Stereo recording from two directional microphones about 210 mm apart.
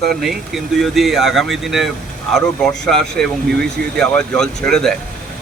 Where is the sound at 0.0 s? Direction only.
Centre (ahead or behind).